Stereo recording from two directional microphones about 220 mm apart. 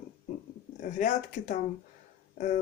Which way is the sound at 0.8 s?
35° left (ahead or behind).